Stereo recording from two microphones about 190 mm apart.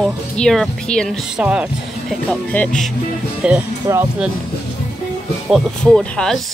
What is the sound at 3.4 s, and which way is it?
Speech, 10° right (ahead or behind).